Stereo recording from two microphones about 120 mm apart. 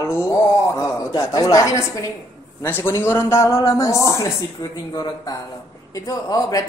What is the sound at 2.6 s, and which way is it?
A man's voice, 20° left (ahead or behind).